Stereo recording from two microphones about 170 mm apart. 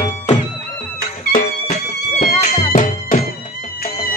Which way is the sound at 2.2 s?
50° left (ahead or behind).